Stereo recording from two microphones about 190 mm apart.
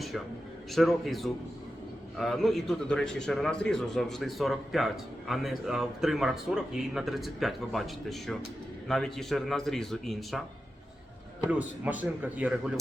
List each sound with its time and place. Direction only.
0.7 s speech: centre (ahead or behind)
11.5 s a man's voice: 10° right (ahead or behind)